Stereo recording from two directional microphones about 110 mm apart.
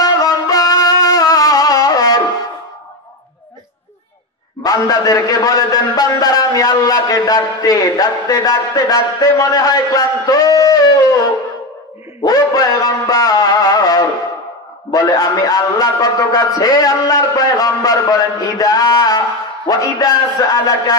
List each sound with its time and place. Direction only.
0.0 s music: 35° left (ahead or behind)
4.6 s a man's voice: 35° left (ahead or behind)
12.3 s music: 35° left (ahead or behind)
14.9 s a man's voice: 35° left (ahead or behind)